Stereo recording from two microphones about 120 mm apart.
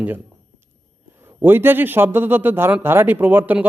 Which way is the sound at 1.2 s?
15° right (ahead or behind).